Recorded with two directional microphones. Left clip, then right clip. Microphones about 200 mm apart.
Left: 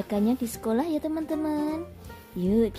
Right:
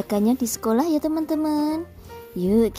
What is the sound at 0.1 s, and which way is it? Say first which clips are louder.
Speech: right 5 dB; 30° right (ahead or behind).